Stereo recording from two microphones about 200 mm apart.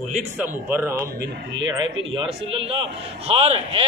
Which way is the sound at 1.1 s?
55° right (ahead or behind).